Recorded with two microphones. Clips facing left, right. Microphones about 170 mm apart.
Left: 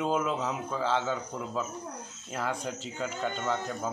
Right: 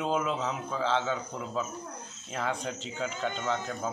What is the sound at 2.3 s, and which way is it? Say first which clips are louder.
Speech: even; 5° left (ahead or behind).